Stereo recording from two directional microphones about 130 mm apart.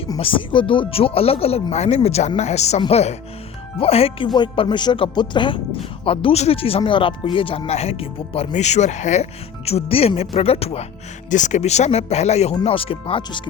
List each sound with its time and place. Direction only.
0.2 s speech: 40° left (ahead or behind)
6.1 s speech: 50° left (ahead or behind)
8.5 s speech: 60° left (ahead or behind)
9.6 s speech: 50° left (ahead or behind)
11.3 s speech: 70° left (ahead or behind)
12.6 s speech: 45° left (ahead or behind)